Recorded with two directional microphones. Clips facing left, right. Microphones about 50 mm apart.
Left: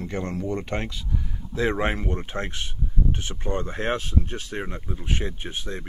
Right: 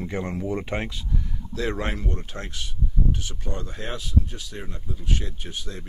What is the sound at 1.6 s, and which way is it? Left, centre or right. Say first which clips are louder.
Speech: left 4 dB; left.